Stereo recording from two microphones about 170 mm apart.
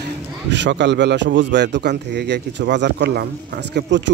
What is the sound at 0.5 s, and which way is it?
Speech, 90° right.